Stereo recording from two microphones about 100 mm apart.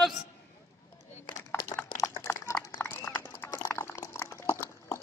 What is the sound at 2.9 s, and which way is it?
Run, 20° left (ahead or behind).